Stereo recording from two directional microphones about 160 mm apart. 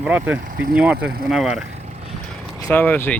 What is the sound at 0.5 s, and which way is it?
Speech, 65° right (ahead or behind).